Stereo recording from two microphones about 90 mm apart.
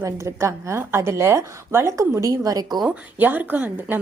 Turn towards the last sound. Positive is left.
turn(degrees=-20)  # may be behind; listen again after turning